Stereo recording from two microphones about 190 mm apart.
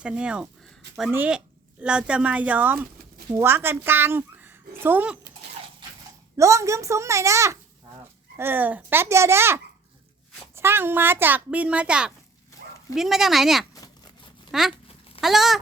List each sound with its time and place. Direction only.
0.0 s a child's voice: 5° right (ahead or behind)
6.3 s a child's voice: 15° right (ahead or behind)